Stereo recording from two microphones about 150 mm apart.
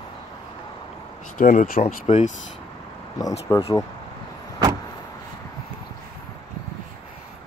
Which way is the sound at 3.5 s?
20° left (ahead or behind).